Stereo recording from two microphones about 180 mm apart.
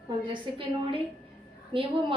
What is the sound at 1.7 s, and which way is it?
Speech, 30° right (ahead or behind).